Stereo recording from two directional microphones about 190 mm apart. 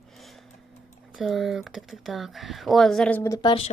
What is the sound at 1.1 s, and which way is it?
Speech, centre (ahead or behind).